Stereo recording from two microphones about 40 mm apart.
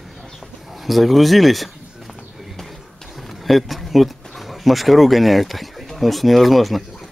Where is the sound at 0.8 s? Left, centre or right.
Centre.